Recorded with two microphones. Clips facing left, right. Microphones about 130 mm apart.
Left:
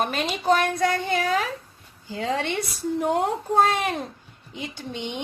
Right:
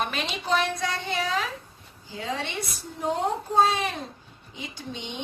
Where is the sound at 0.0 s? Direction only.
45° left (ahead or behind).